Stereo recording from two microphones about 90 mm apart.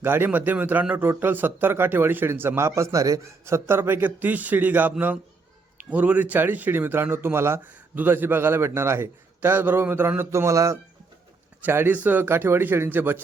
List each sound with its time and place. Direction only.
0.0 s a man's voice: 25° right (ahead or behind)
11.6 s speech: 25° right (ahead or behind)